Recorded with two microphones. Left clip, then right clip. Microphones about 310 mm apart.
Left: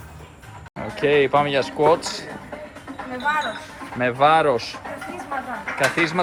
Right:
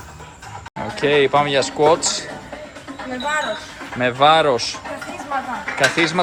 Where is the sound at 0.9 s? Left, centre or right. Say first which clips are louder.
Right 2 dB; centre.